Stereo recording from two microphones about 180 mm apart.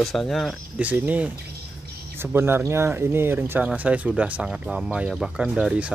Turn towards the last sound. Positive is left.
turn(degrees=-5)  # may be behind; listen again after turning